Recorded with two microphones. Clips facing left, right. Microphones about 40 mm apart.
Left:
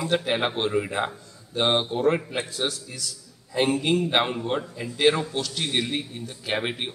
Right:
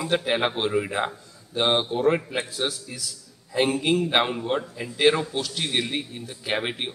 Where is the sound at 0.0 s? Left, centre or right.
Centre.